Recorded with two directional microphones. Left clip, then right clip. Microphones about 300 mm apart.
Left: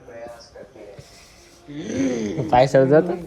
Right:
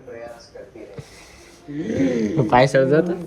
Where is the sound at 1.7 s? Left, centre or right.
Centre.